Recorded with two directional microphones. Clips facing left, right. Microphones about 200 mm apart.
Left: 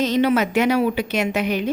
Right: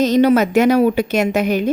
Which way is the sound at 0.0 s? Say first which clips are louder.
Right 5 dB; 40° right (ahead or behind).